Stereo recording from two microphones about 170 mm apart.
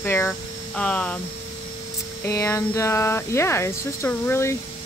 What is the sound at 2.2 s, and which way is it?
Speech, 15° left (ahead or behind).